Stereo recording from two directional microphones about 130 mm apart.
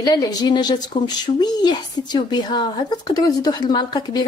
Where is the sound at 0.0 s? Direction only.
30° left (ahead or behind).